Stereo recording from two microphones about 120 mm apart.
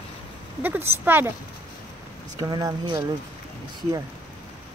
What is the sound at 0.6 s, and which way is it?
Speech, 15° right (ahead or behind).